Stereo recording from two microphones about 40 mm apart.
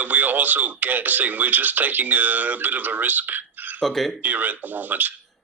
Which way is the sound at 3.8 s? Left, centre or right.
Centre.